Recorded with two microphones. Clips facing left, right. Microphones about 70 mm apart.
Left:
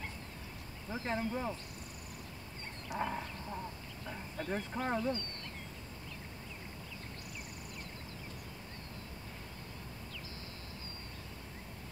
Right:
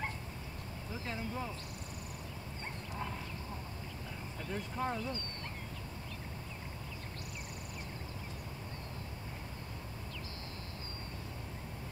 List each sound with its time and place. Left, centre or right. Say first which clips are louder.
1.0 s speech: left 5 dB; left
4.5 s speech: left 1 dB; left